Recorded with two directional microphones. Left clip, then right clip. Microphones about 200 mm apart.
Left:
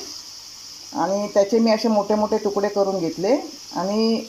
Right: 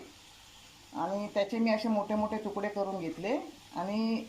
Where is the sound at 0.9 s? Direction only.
35° left (ahead or behind).